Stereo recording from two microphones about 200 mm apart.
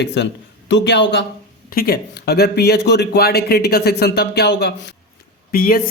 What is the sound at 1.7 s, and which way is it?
Speech, 50° left (ahead or behind).